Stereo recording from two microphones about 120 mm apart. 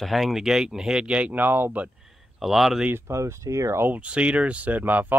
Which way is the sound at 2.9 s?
20° right (ahead or behind).